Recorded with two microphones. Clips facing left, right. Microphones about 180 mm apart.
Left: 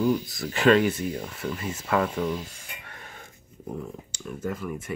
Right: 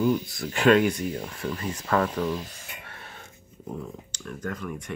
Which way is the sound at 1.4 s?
25° left (ahead or behind).